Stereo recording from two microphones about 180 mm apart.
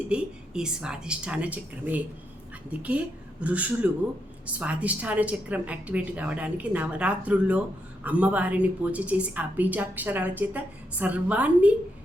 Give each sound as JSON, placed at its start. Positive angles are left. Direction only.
{"t": 0.1, "sound": "a woman's voice", "side_deg": -5}
{"t": 3.4, "sound": "a woman's voice", "side_deg": -10}